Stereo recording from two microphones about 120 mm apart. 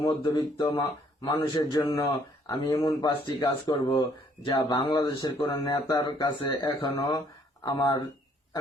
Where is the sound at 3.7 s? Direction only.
45° left (ahead or behind).